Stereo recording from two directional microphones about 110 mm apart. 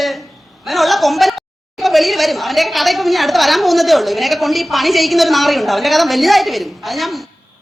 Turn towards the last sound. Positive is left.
turn(degrees=0)  # may be behind; listen again after turning